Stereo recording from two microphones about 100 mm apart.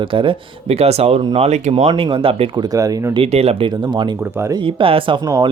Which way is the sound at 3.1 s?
80° right.